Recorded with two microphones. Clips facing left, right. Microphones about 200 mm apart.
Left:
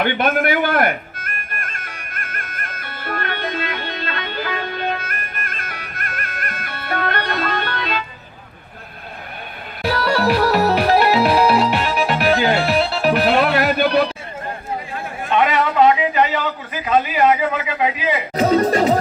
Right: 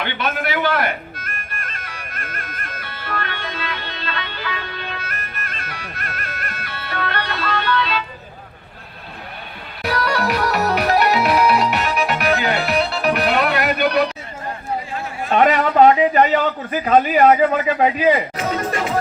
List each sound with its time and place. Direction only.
0.0 s bagpipes: 50° left (ahead or behind)
9.8 s music: 30° left (ahead or behind)
15.3 s a man's voice: 45° right (ahead or behind)
18.3 s music: 35° left (ahead or behind)